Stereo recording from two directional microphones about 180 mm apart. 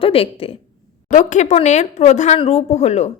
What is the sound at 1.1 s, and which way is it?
A woman's voice, 40° left (ahead or behind).